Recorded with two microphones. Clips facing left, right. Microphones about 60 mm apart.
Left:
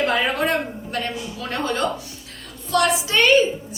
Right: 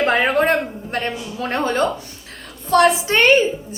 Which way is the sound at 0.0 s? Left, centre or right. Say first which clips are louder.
Right 4 dB; right.